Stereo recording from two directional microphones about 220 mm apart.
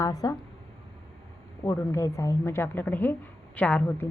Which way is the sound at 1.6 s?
15° left (ahead or behind).